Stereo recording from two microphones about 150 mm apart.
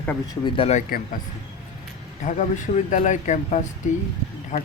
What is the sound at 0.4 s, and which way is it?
Speech, 35° left (ahead or behind).